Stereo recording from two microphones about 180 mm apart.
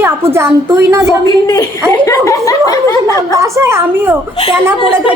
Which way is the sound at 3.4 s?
15° right (ahead or behind).